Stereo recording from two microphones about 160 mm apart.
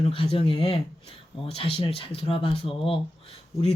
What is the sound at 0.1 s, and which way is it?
Speech, 35° left (ahead or behind).